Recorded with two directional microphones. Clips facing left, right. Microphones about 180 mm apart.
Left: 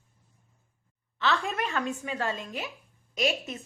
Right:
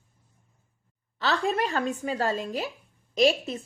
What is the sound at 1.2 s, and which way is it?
A woman's voice, 35° right (ahead or behind).